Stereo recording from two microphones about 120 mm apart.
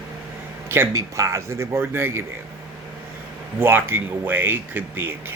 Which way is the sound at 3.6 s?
15° right (ahead or behind).